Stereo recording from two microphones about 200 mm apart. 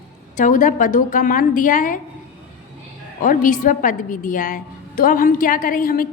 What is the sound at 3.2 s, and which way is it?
A woman's voice, 40° left (ahead or behind).